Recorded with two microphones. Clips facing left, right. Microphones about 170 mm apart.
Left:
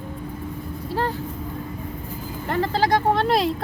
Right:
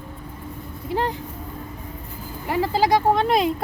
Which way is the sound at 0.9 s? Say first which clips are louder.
Right 1 dB; 15° right (ahead or behind).